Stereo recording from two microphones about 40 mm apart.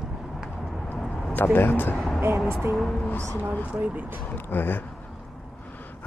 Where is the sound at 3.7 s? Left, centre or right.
Right.